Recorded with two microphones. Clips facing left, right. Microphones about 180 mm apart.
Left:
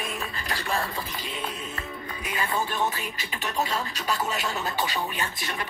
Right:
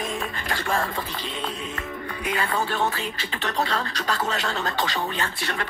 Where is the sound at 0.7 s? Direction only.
45° right (ahead or behind).